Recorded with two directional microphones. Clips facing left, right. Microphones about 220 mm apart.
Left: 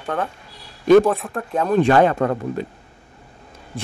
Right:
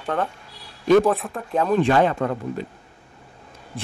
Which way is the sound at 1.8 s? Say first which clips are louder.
Left 3 dB; 50° left (ahead or behind).